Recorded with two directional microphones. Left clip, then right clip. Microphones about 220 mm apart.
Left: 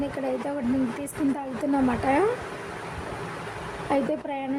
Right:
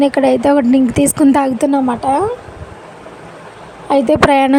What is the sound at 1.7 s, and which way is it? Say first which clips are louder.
Speech: right 9 dB; 30° right (ahead or behind).